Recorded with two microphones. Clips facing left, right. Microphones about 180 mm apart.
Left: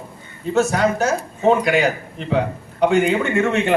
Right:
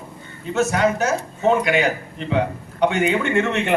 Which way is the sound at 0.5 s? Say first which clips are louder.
Left 1 dB; 35° left (ahead or behind).